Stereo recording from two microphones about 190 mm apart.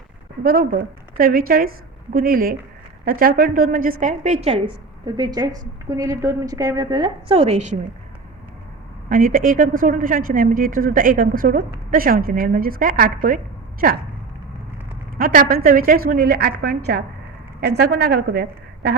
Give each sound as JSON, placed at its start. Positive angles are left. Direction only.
{"t": 0.4, "sound": "a woman's voice", "side_deg": -50}
{"t": 4.0, "sound": "a woman's voice", "side_deg": -40}
{"t": 9.0, "sound": "a woman's voice", "side_deg": -45}
{"t": 15.2, "sound": "a woman's voice", "side_deg": -50}